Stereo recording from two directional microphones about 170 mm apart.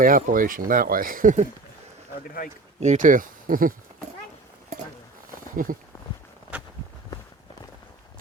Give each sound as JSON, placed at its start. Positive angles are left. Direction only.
{"t": 0.0, "sound": "speech", "side_deg": -55}
{"t": 2.8, "sound": "speech", "side_deg": -45}
{"t": 5.6, "sound": "speech", "side_deg": -55}
{"t": 6.5, "sound": "a sound", "side_deg": -5}